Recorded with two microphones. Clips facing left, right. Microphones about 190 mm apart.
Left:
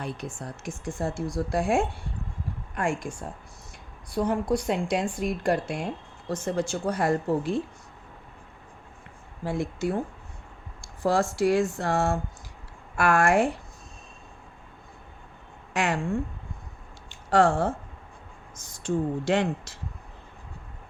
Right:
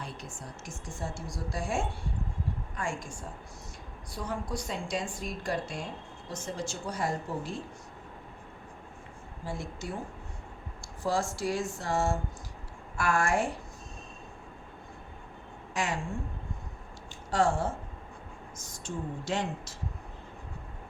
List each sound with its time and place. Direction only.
0.0 s speech: 60° left (ahead or behind)
4.2 s speech: 60° left (ahead or behind)
9.4 s speech: 65° left (ahead or behind)
11.0 s speech: 65° left (ahead or behind)
15.7 s a woman's voice: 65° left (ahead or behind)
17.3 s speech: 65° left (ahead or behind)